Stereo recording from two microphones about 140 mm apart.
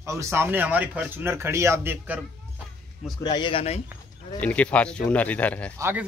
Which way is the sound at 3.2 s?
30° left (ahead or behind).